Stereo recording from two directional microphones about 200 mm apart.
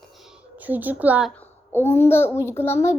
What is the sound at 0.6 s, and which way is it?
Speech, 10° right (ahead or behind).